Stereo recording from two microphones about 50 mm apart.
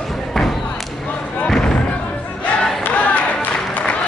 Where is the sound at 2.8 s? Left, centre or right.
Left.